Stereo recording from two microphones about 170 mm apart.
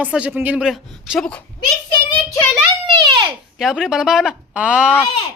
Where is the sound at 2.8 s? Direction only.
30° right (ahead or behind).